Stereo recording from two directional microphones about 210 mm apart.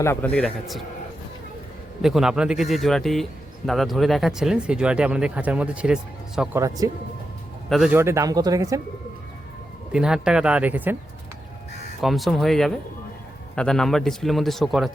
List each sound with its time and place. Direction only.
0.0 s a man's voice: 10° left (ahead or behind)
2.0 s speech: centre (ahead or behind)
6.6 s speech: 15° right (ahead or behind)
7.7 s speech: 5° right (ahead or behind)
9.9 s speech: 5° right (ahead or behind)
12.0 s speech: centre (ahead or behind)